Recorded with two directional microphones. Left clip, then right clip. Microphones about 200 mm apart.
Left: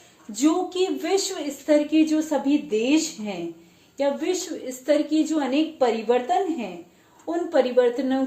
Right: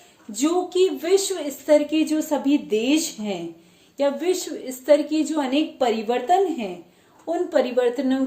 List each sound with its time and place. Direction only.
0.3 s a woman's voice: 35° right (ahead or behind)